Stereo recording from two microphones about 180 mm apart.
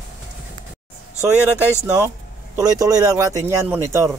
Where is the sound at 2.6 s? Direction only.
20° right (ahead or behind).